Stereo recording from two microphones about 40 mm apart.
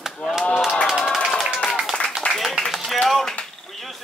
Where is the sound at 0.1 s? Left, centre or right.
Centre.